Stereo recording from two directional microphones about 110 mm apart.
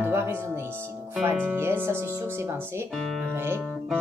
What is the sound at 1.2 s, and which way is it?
Speech, 15° right (ahead or behind).